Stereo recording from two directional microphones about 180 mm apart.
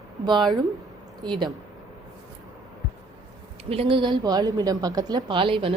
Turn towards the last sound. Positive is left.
turn(degrees=-30)  # may be behind; listen again after turning